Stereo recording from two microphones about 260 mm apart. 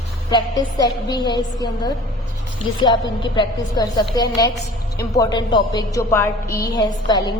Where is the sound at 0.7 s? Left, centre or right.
Centre.